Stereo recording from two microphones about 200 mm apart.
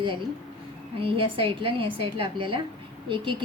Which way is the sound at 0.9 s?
25° right (ahead or behind).